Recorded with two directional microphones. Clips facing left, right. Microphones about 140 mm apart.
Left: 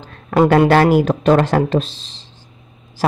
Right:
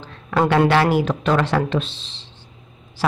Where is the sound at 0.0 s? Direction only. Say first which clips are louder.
Left 3 dB; 45° left (ahead or behind).